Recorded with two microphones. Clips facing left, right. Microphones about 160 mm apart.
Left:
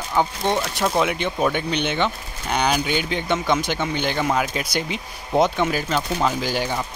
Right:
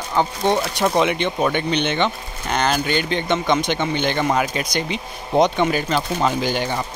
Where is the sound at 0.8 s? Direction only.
Centre (ahead or behind).